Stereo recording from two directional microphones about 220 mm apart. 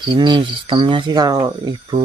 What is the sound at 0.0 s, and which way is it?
Speech, 20° right (ahead or behind).